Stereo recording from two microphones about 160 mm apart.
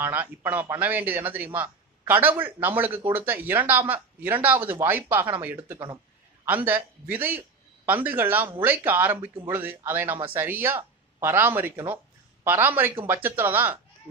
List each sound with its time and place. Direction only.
0.0 s a man's voice: 10° right (ahead or behind)